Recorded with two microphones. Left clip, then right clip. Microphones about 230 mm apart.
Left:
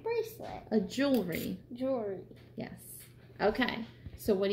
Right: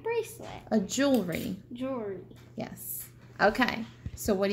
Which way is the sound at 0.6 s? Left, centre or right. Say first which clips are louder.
Right 4 dB; right.